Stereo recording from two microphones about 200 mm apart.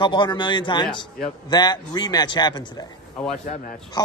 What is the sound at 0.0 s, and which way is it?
A man's voice, 20° left (ahead or behind).